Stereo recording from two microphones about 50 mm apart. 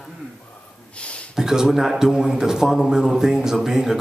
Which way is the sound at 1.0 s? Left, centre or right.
Left.